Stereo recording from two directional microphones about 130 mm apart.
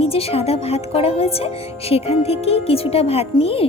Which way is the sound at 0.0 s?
50° left (ahead or behind).